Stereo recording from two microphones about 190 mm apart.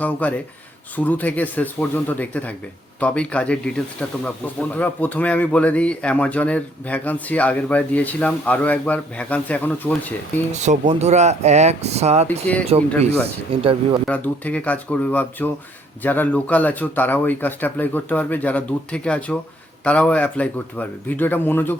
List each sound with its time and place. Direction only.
0.0 s speech: 10° left (ahead or behind)
4.7 s speech: 10° left (ahead or behind)
10.5 s speech: 40° right (ahead or behind)
14.1 s speech: 10° left (ahead or behind)